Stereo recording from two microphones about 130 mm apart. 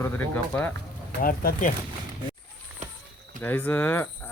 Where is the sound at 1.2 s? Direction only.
90° left.